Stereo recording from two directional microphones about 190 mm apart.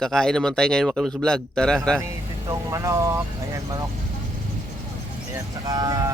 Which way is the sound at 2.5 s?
15° right (ahead or behind).